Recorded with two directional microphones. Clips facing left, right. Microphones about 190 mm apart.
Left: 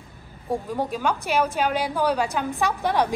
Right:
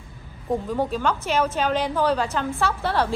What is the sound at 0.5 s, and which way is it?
A woman's voice, 10° left (ahead or behind).